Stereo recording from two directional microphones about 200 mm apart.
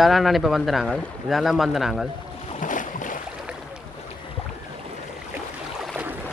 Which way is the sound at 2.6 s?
40° left (ahead or behind).